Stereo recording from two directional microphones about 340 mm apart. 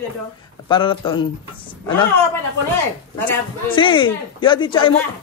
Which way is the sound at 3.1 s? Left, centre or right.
Centre.